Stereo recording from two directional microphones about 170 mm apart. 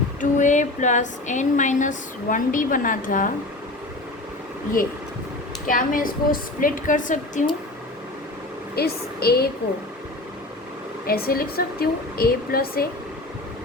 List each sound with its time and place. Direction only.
0.2 s speech: 45° left (ahead or behind)
5.6 s speech: 55° left (ahead or behind)
8.7 s a woman's voice: 65° left (ahead or behind)
11.0 s a woman's voice: 60° left (ahead or behind)